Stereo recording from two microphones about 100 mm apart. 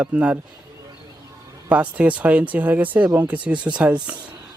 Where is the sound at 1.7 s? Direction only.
15° right (ahead or behind).